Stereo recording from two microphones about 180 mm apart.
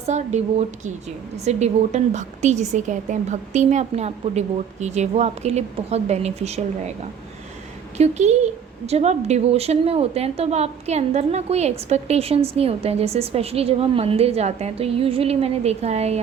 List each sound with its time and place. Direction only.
0.0 s a woman's voice: 40° right (ahead or behind)
7.9 s a woman's voice: 40° right (ahead or behind)